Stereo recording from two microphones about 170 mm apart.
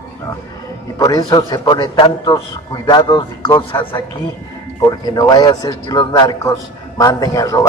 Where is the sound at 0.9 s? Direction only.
20° left (ahead or behind).